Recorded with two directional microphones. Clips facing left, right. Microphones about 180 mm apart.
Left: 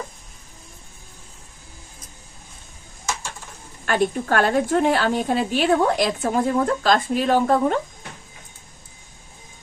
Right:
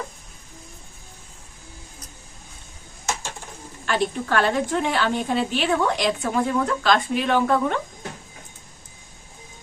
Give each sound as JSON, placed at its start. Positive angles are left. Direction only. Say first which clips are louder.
{"t": 3.8, "sound": "a woman's voice", "louder": "left 3 dB", "side_deg": 45}